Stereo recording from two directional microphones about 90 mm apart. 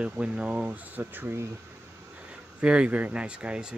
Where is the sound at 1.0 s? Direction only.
25° right (ahead or behind).